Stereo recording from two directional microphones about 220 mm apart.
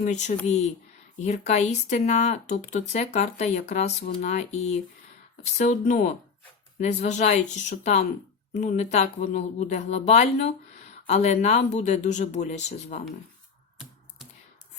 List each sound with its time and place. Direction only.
0.0 s speech: 35° left (ahead or behind)